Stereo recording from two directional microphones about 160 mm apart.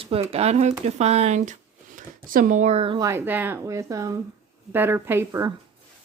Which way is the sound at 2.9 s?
20° right (ahead or behind).